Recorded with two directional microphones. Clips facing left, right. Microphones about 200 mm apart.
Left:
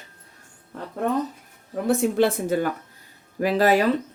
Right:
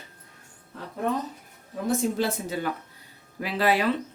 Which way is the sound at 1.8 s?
55° left (ahead or behind).